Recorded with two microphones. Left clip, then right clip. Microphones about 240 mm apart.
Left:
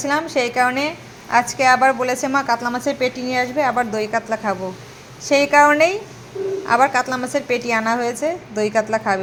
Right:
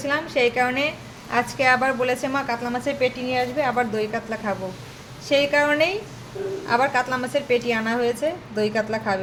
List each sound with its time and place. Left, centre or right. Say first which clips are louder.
0.0 s a woman's voice: left 2 dB; centre